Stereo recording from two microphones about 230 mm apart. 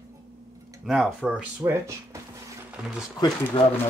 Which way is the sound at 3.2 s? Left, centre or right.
Centre.